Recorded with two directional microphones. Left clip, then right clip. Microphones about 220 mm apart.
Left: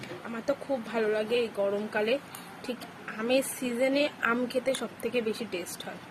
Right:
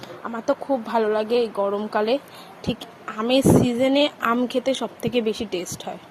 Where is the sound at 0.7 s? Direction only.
25° right (ahead or behind).